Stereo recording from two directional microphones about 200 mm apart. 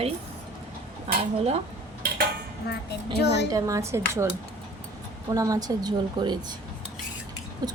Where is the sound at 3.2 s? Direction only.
55° left (ahead or behind).